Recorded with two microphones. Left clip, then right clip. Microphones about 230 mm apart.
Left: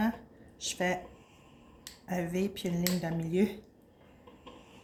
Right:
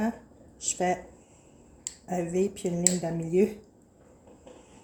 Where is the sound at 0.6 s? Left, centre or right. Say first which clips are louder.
Right 4 dB; centre.